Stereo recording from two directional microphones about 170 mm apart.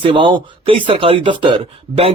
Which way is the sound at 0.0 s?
30° right (ahead or behind).